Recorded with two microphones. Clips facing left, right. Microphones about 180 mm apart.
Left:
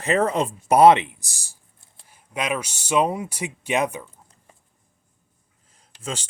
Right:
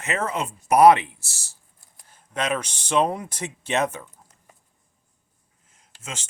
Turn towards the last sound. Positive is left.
turn(degrees=35)  # may be behind; listen again after turning